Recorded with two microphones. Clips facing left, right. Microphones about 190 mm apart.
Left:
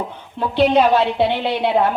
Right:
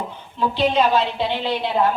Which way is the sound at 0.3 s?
60° left (ahead or behind).